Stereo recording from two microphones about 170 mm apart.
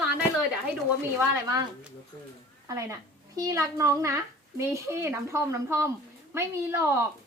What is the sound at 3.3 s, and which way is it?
A child's voice, 20° right (ahead or behind).